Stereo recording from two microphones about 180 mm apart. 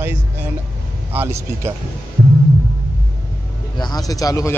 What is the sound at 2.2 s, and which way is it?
Music, 70° right (ahead or behind).